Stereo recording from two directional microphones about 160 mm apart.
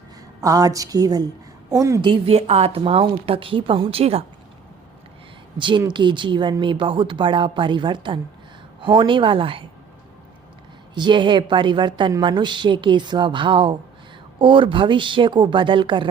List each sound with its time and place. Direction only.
0.4 s a woman's voice: 20° right (ahead or behind); by 4.2 s 40° right (ahead or behind)
5.5 s a woman's voice: 30° right (ahead or behind)
10.9 s a woman's voice: 30° right (ahead or behind)